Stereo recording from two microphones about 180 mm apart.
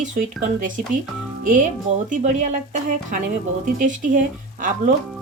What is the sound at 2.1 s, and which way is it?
Speech, 45° right (ahead or behind).